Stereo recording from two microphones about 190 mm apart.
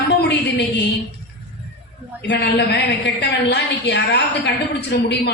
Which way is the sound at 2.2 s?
65° left (ahead or behind).